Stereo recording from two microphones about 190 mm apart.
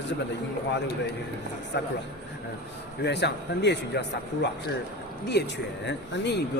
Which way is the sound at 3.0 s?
65° left (ahead or behind).